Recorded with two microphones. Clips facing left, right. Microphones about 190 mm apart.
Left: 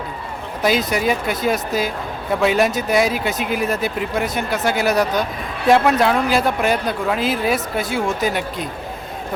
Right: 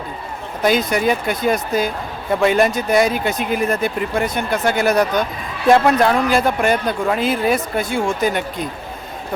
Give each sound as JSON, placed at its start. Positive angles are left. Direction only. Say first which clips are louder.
{"t": 0.6, "sound": "speech", "louder": "right 2 dB", "side_deg": 0}